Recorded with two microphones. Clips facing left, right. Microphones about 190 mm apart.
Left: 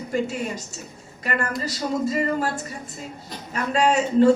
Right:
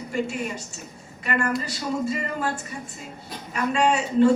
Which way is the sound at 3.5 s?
40° left (ahead or behind).